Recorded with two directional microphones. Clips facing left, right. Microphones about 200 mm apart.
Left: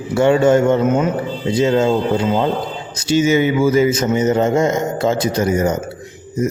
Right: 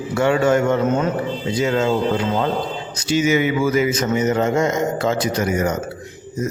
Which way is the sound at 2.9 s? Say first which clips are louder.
Left 3 dB; 25° left (ahead or behind).